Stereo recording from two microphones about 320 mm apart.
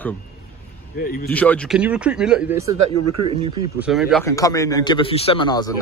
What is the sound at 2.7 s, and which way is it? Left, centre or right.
Speech, right.